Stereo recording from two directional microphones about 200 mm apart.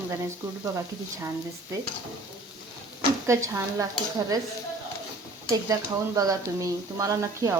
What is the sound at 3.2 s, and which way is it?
Speech, 15° right (ahead or behind).